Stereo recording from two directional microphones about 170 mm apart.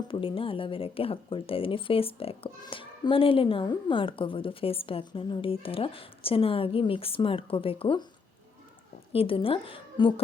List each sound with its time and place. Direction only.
0.1 s speech: 30° left (ahead or behind)
9.1 s speech: 35° left (ahead or behind)